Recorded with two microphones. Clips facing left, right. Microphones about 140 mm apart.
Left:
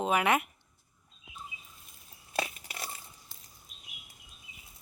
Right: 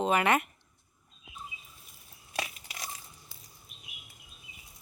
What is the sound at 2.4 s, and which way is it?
Crushing, 30° left (ahead or behind).